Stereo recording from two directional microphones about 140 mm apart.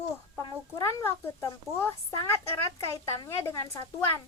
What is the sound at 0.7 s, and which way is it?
A child's voice, 20° left (ahead or behind).